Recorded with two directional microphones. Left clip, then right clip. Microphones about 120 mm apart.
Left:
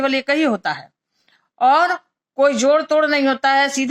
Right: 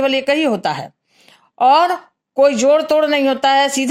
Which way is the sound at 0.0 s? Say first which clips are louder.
Right 2 dB; 45° right (ahead or behind).